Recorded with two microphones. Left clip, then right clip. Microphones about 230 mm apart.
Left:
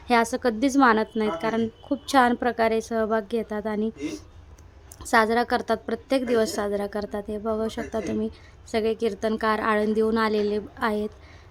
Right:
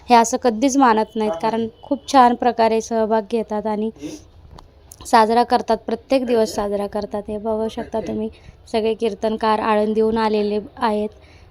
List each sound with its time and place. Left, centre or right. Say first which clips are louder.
0.1 s a woman's voice: right 8 dB; centre